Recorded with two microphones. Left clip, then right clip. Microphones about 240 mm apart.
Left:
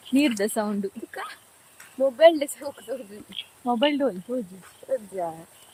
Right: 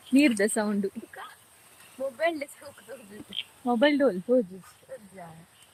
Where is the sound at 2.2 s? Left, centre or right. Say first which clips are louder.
Left 12 dB; left.